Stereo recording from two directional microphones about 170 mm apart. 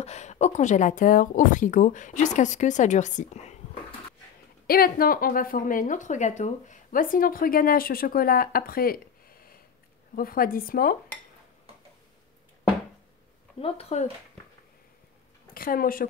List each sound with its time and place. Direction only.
0.0 s speech: 40° left (ahead or behind)
4.6 s a woman's voice: 60° left (ahead or behind)
13.6 s speech: 35° left (ahead or behind)
15.5 s a woman's voice: 60° left (ahead or behind)